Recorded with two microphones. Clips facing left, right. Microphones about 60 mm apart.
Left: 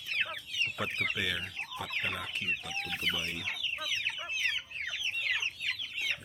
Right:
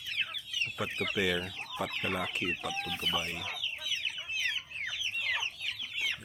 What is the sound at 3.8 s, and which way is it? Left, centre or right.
Chicken, left.